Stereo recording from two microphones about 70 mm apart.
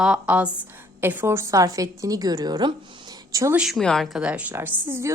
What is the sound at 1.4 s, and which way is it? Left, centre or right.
A woman's voice, right.